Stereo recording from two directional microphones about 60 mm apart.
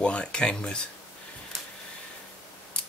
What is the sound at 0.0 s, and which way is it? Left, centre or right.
Speech, centre.